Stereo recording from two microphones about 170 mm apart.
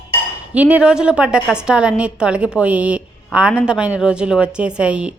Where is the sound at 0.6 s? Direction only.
10° right (ahead or behind).